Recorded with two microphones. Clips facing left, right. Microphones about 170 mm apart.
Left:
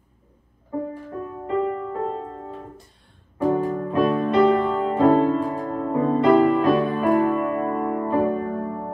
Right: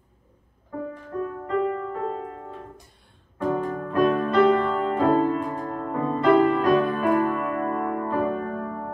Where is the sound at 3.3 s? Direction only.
20° left (ahead or behind).